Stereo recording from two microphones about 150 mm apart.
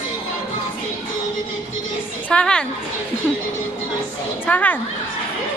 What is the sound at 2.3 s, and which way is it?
Speech, 5° left (ahead or behind).